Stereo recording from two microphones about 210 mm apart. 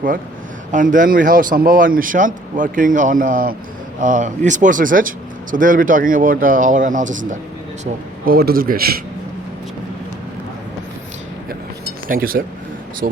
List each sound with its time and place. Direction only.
0.7 s a man's voice: 40° right (ahead or behind)
12.0 s a man's voice: 45° right (ahead or behind)